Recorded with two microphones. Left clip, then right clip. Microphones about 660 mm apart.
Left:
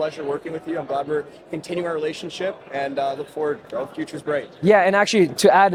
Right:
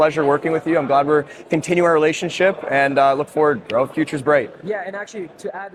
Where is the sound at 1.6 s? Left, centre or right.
Right.